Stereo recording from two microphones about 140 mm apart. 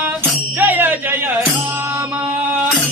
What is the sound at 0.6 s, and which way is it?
Music, 15° right (ahead or behind).